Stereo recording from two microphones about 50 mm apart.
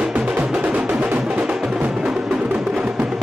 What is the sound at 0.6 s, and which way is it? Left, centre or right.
Music, right.